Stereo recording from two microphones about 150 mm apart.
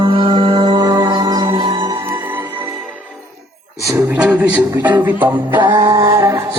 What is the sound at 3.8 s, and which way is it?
Speech, 20° right (ahead or behind).